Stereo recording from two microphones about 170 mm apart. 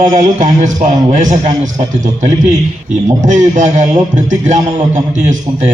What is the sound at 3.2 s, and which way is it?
A man's voice, 45° right (ahead or behind).